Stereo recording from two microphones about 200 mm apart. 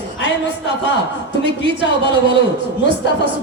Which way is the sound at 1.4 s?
60° left (ahead or behind).